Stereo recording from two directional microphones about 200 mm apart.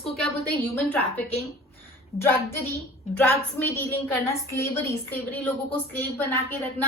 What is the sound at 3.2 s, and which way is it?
A woman's voice, 10° left (ahead or behind).